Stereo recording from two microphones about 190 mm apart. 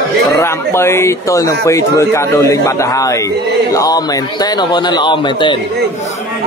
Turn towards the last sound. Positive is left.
turn(degrees=25)  # may be behind; listen again after turning